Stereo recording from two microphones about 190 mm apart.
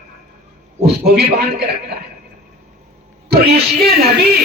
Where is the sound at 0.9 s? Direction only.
55° right (ahead or behind).